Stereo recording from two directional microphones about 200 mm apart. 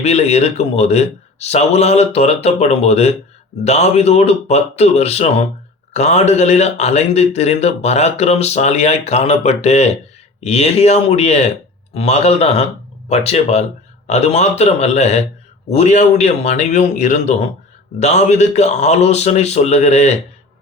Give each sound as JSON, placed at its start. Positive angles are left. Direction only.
{"t": 0.0, "sound": "speech", "side_deg": 35}